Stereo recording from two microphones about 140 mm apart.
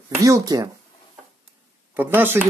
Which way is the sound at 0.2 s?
25° right (ahead or behind).